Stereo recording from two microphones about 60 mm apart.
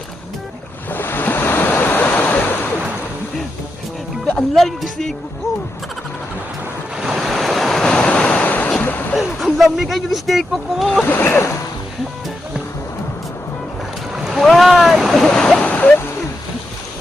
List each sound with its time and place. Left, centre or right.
0.9 s waves: left
4.5 s music: centre
6.9 s waves: centre; by 8.7 s left
8.8 s a sound: left
9.1 s speech: centre
11.0 s splash: left
14.3 s a sound: centre
15.3 s splash: centre
15.6 s a sound: left